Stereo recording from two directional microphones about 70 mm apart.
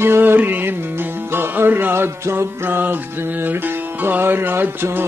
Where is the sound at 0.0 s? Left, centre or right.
Right.